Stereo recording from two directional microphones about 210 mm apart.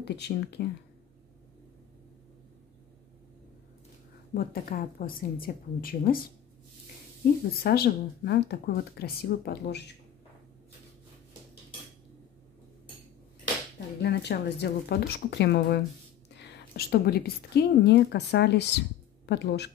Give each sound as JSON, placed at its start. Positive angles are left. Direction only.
{"t": 0.0, "sound": "a woman's voice", "side_deg": 55}
{"t": 4.3, "sound": "a woman's voice", "side_deg": 45}
{"t": 7.6, "sound": "a woman's voice", "side_deg": 50}
{"t": 14.0, "sound": "a woman's voice", "side_deg": 50}